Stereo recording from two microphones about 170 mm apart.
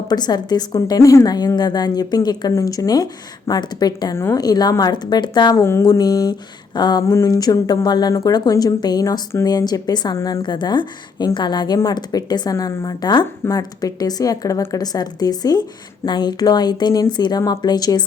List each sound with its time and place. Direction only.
0.1 s speech: 25° left (ahead or behind)